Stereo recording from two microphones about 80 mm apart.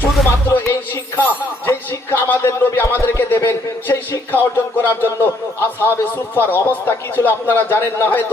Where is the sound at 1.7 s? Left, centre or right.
Left.